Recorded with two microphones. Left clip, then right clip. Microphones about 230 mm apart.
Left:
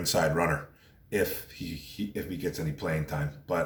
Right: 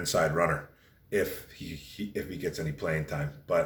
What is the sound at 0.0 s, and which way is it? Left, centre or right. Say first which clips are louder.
Speech: even; centre.